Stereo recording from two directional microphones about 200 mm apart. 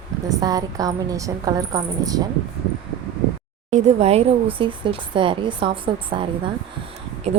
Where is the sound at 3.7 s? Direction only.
35° right (ahead or behind).